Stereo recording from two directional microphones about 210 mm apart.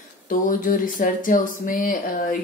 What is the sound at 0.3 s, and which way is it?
Speech, 40° left (ahead or behind).